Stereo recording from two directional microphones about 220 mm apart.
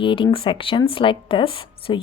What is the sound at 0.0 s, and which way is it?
A woman's voice, 20° left (ahead or behind).